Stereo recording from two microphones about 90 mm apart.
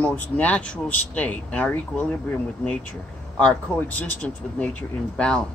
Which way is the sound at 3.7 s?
20° left (ahead or behind).